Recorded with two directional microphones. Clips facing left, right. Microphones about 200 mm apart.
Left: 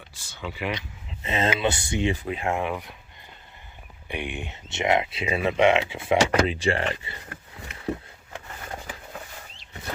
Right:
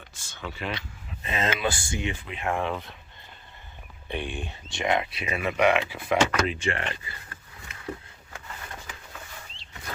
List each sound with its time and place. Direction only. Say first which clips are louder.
0.3 s speech: left 3 dB; 15° left (ahead or behind)
1.3 s speech: left 3 dB; 25° left (ahead or behind)
2.5 s speech: even; 15° left (ahead or behind)
4.1 s speech: even; 15° left (ahead or behind)